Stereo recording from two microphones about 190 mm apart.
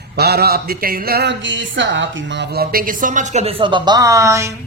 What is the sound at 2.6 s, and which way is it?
A woman's voice, 50° right (ahead or behind).